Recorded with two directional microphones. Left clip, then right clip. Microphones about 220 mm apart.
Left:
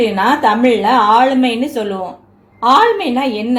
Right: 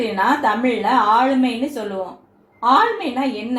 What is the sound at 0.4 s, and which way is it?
Speech, 40° left (ahead or behind).